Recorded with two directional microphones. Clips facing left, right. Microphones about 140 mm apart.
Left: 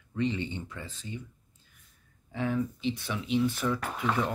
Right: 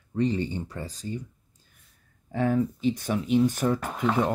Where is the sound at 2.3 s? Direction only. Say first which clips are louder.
Right 6 dB; 45° right (ahead or behind).